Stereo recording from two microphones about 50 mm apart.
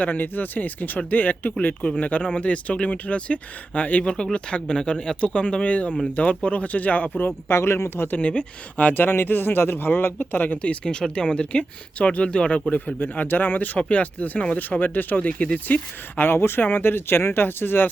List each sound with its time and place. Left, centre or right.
0.0 s speech: left
4.0 s speech: centre
7.4 s speech: left
8.1 s speech: left
8.9 s speech: left
11.1 s speech: centre
13.0 s speech: left